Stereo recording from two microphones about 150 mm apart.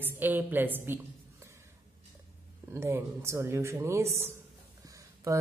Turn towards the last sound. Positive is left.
turn(degrees=-20)  # may be behind; listen again after turning